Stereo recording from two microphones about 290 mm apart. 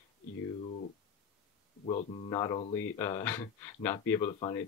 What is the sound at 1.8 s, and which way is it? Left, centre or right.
Speech, centre.